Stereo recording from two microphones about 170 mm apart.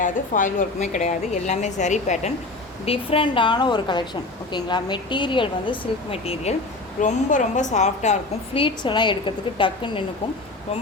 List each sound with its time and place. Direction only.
0.0 s a woman's voice: 50° left (ahead or behind); by 10.0 s 30° left (ahead or behind)